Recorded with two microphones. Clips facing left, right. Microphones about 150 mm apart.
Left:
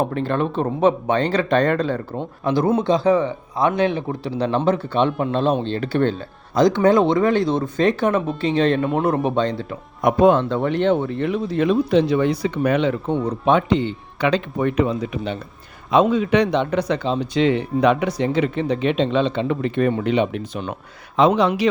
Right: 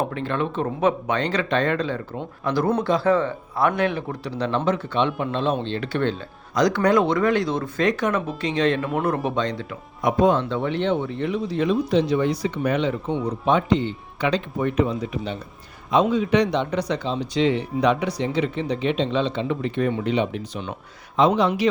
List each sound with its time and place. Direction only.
0.1 s speech: 40° left (ahead or behind)
2.1 s speech: 25° left (ahead or behind); by 6.1 s 40° left (ahead or behind)
6.5 s speech: 25° left (ahead or behind)
10.0 s speech: 55° left (ahead or behind)
21.2 s a man's voice: 75° left (ahead or behind)